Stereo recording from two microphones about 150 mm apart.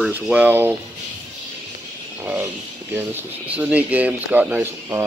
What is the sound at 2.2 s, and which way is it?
Speech, 15° right (ahead or behind).